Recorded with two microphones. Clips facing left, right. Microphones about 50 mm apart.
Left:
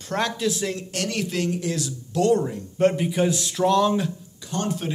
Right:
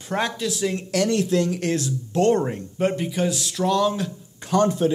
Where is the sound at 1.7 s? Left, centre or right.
Right.